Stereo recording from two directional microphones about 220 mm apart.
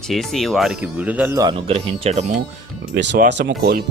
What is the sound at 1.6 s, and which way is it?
Speech, 30° right (ahead or behind).